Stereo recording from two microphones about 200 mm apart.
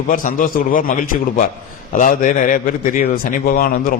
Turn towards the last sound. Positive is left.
turn(degrees=45)  # may be behind; listen again after turning